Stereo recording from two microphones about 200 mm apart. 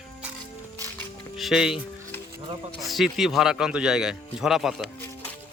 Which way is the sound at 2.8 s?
Centre (ahead or behind).